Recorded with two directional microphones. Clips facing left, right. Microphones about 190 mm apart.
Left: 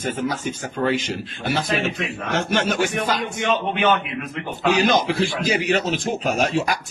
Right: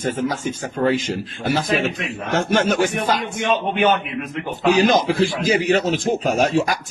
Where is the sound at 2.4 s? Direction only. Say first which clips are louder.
Right 4 dB; 45° right (ahead or behind).